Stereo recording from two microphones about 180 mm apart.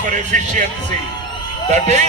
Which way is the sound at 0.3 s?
45° right (ahead or behind).